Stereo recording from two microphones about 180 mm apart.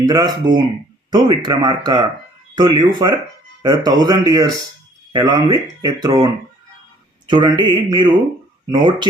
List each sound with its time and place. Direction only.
0.0 s speech: 20° right (ahead or behind)